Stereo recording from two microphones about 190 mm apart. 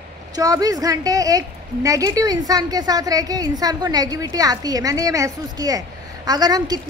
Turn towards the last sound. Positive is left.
turn(degrees=-20)  # may be behind; listen again after turning